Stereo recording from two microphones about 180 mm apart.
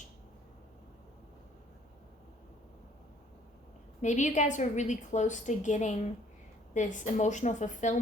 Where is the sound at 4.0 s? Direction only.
40° left (ahead or behind).